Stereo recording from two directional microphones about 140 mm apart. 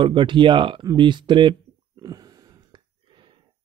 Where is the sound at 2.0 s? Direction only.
25° right (ahead or behind).